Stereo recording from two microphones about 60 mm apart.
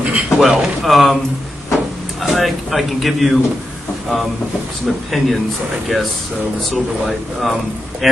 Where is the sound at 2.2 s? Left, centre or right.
Centre.